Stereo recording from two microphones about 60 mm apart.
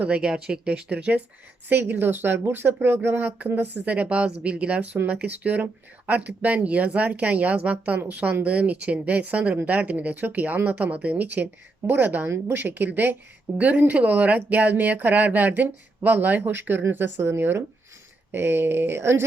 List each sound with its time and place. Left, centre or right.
0.0 s speech: centre; by 19.2 s right